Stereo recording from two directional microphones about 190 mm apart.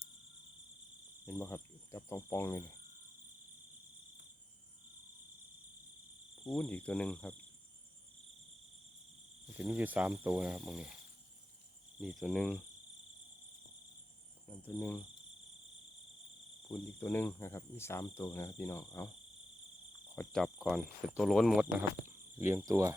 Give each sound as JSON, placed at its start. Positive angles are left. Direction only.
{"t": 1.2, "sound": "speech", "side_deg": 15}
{"t": 6.5, "sound": "speech", "side_deg": 10}
{"t": 9.6, "sound": "speech", "side_deg": -5}
{"t": 11.9, "sound": "speech", "side_deg": 0}
{"t": 14.4, "sound": "speech", "side_deg": 10}
{"t": 17.0, "sound": "speech", "side_deg": 10}
{"t": 18.0, "sound": "speech", "side_deg": 25}
{"t": 18.3, "sound": "speech", "side_deg": 15}
{"t": 18.9, "sound": "speech", "side_deg": 25}
{"t": 20.1, "sound": "speech", "side_deg": 0}